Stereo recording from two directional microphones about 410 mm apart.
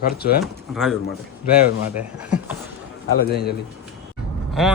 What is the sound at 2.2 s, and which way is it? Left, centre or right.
Speech, centre.